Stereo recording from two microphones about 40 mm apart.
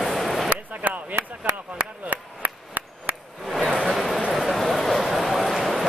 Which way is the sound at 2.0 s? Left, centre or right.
Right.